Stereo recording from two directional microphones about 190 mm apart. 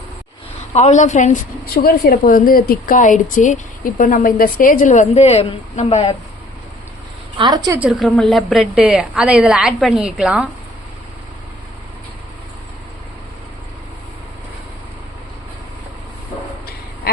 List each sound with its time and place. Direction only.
0.7 s a woman's voice: 35° left (ahead or behind)
7.3 s a woman's voice: 20° right (ahead or behind)
7.8 s a woman's voice: 5° right (ahead or behind)